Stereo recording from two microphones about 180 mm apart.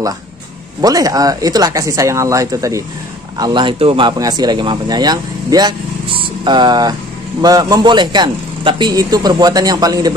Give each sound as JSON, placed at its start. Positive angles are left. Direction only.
{"t": 0.7, "sound": "speech", "side_deg": -20}